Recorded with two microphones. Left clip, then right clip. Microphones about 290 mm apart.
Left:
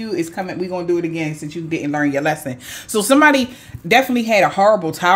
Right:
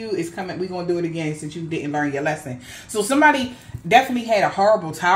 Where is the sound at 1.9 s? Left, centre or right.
Left.